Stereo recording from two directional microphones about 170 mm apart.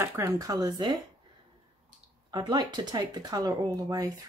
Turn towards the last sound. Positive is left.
turn(degrees=-20)  # may be behind; listen again after turning